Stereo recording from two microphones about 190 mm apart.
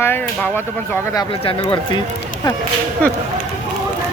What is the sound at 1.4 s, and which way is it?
Speech, 25° left (ahead or behind).